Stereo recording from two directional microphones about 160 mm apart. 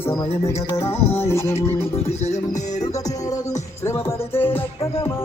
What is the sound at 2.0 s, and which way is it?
Music, 40° left (ahead or behind).